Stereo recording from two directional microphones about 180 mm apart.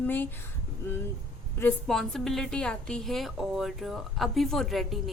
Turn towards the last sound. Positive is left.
turn(degrees=0)  # may be behind; listen again after turning